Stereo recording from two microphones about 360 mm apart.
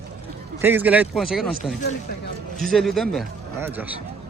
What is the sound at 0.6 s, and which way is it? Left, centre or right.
Speech, centre.